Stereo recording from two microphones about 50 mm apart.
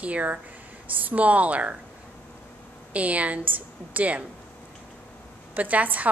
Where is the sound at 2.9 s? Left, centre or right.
Right.